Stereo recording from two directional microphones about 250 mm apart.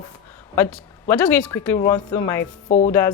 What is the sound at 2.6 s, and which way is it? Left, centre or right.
Speech, left.